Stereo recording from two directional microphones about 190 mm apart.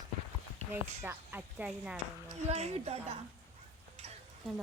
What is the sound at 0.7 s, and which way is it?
Speech, 10° right (ahead or behind).